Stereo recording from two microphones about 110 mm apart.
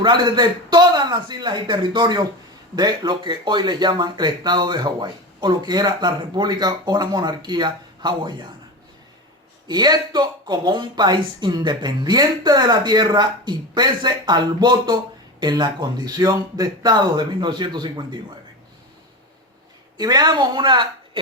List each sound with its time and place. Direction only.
0.0 s speech: 45° right (ahead or behind)
9.6 s speech: 40° right (ahead or behind)
20.0 s a woman's voice: 40° right (ahead or behind)